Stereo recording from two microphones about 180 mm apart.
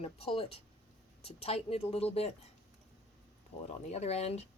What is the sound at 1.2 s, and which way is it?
Speech, 35° left (ahead or behind).